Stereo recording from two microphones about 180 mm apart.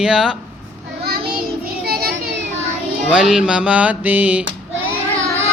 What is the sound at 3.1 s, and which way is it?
Mantra, 5° right (ahead or behind).